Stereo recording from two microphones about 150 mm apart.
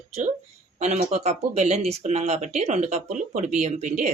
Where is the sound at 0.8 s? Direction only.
45° right (ahead or behind).